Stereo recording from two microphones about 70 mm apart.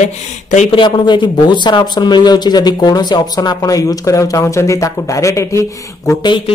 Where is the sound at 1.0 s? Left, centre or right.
Left.